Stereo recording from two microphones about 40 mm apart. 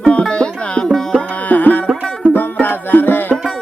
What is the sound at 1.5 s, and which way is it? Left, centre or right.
Music, left.